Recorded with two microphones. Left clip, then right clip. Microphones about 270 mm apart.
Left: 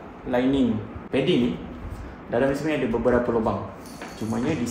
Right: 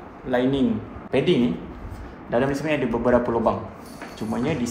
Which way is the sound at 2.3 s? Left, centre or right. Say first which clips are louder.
Even; right.